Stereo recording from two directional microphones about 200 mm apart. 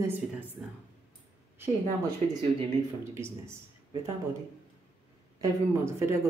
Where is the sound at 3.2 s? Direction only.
15° right (ahead or behind).